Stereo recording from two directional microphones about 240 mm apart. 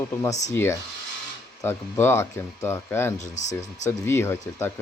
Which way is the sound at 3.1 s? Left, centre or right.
Left.